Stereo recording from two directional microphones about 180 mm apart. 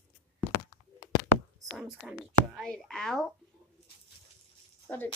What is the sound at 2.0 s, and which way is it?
Speech, centre (ahead or behind).